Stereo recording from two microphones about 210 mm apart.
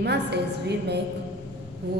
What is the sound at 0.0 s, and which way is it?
A woman's voice, 55° right (ahead or behind).